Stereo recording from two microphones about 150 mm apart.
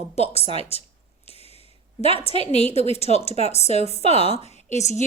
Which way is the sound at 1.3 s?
45° left (ahead or behind).